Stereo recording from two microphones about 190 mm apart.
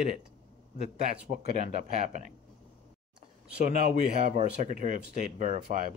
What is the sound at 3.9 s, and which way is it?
Speech, 40° right (ahead or behind).